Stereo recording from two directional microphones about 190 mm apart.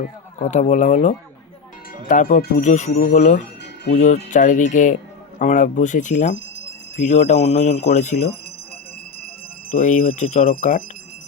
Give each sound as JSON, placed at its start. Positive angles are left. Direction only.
{"t": 0.0, "sound": "speech", "side_deg": 40}
{"t": 2.6, "sound": "speech", "side_deg": 40}
{"t": 9.7, "sound": "speech", "side_deg": 45}